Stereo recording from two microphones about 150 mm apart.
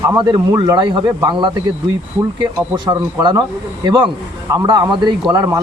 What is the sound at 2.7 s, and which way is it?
A man's voice, 30° right (ahead or behind).